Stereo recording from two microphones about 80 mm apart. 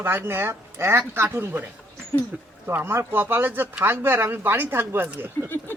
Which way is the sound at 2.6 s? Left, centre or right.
Right.